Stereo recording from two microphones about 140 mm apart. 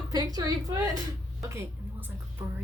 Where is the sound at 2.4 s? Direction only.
20° right (ahead or behind).